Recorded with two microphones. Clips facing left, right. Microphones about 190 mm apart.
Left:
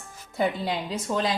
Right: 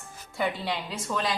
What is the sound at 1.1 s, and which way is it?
Speech, 25° left (ahead or behind).